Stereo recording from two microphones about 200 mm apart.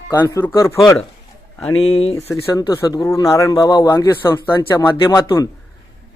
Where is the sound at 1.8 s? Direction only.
30° left (ahead or behind).